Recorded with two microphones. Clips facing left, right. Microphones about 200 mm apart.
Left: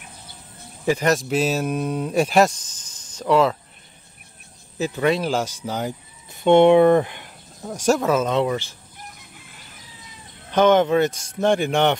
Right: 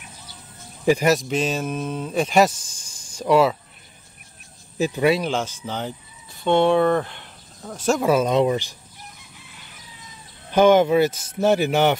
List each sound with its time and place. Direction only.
0.8 s speech: 15° right (ahead or behind)
1.1 s speech: 5° left (ahead or behind)
2.6 s snake: 10° right (ahead or behind)
4.7 s speech: 15° right (ahead or behind)
5.1 s speech: 5° left (ahead or behind)
8.0 s speech: 10° right (ahead or behind)
10.5 s speech: 10° right (ahead or behind)